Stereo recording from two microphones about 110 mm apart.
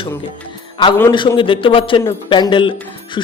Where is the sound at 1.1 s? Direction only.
45° left (ahead or behind).